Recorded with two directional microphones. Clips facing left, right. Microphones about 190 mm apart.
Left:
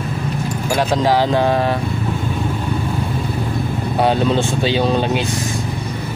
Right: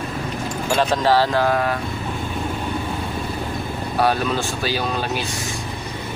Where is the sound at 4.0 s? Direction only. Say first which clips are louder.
Left 4 dB; 25° left (ahead or behind).